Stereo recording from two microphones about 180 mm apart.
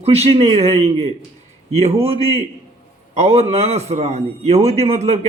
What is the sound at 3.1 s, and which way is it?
A man's voice, 35° right (ahead or behind).